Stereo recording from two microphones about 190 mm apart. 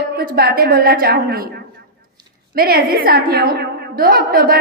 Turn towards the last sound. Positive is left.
turn(degrees=-50)  # may be behind; listen again after turning